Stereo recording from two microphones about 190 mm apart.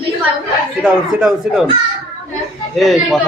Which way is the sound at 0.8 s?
5° right (ahead or behind).